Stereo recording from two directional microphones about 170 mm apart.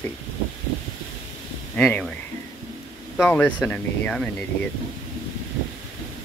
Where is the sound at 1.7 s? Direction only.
5° left (ahead or behind).